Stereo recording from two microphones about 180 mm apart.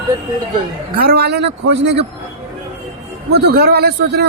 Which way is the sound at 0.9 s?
60° right (ahead or behind).